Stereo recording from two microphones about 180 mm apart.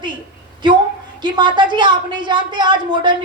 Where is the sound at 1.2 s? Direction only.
25° right (ahead or behind).